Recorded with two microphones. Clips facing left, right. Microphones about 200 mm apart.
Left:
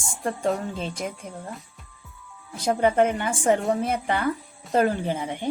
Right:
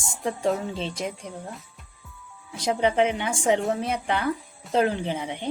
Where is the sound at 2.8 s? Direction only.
50° left (ahead or behind).